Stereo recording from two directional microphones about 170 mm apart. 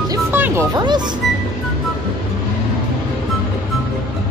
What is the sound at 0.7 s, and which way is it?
Speech, 25° right (ahead or behind).